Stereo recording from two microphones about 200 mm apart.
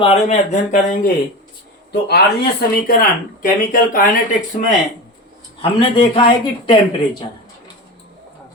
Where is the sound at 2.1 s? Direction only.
50° left (ahead or behind).